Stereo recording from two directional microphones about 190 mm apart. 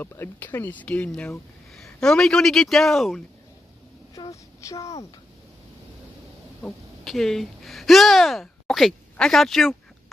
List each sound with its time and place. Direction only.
0.0 s speech: 10° left (ahead or behind)
4.1 s a woman's voice: 15° left (ahead or behind)
6.6 s speech: centre (ahead or behind)